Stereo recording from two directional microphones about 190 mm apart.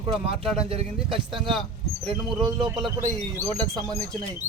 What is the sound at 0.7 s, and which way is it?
Speech, 30° right (ahead or behind).